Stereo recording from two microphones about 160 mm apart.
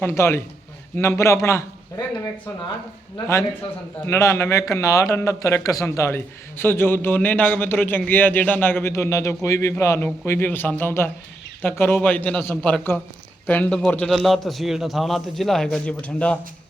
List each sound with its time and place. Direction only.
0.0 s a man's voice: 15° left (ahead or behind)
4.0 s a man's voice: 15° left (ahead or behind)